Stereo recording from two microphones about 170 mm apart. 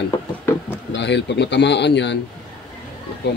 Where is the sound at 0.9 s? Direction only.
90° left.